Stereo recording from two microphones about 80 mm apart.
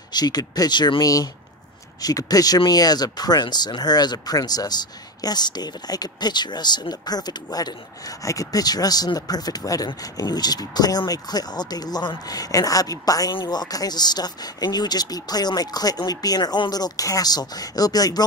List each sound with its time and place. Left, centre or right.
0.1 s speech: left
1.0 s speech: left
8.2 s speech: left
13.3 s speech: left